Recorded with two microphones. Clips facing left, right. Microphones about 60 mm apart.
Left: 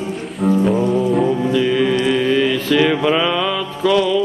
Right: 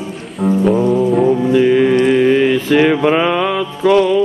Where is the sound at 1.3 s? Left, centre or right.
Right.